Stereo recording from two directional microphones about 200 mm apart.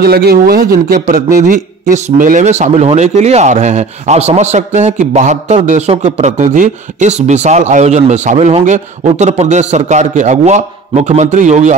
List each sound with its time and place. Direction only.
0.0 s a man's voice: 50° right (ahead or behind)